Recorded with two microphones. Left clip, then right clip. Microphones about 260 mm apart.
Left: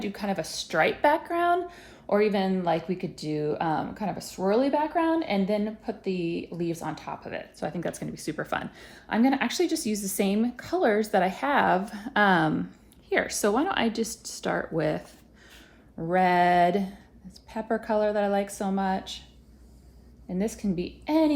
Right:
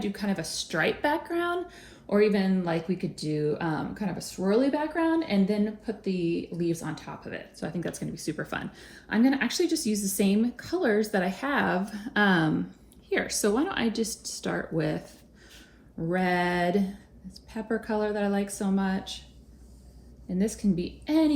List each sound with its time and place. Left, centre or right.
0.0 s speech: left
20.2 s speech: left